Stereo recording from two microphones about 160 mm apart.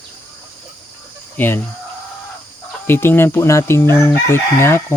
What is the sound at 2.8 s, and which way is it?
Speech, 15° left (ahead or behind).